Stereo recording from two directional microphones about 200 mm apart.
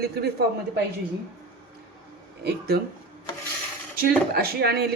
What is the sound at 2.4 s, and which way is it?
Speech, 50° right (ahead or behind).